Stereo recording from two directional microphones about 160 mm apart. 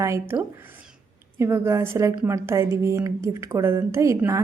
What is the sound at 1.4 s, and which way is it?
Speech, 15° right (ahead or behind).